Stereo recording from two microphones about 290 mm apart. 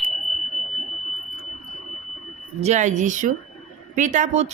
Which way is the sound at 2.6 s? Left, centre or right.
Right.